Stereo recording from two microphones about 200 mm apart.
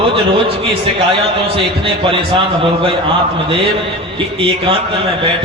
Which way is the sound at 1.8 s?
25° right (ahead or behind).